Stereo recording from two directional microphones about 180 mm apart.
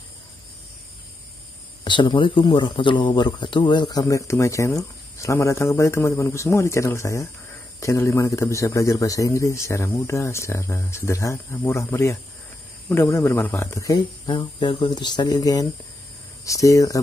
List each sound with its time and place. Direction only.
1.9 s speech: 25° left (ahead or behind)